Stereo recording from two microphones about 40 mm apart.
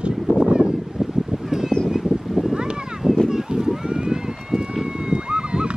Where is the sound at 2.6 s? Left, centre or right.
Centre.